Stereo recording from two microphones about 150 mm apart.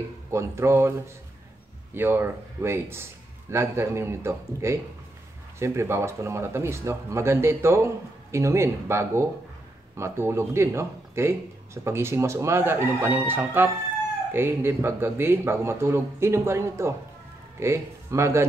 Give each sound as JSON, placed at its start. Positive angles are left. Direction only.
{"t": 0.3, "sound": "speech", "side_deg": -15}
{"t": 2.0, "sound": "speech", "side_deg": -15}